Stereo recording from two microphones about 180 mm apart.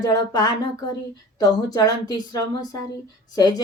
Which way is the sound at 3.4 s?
20° left (ahead or behind).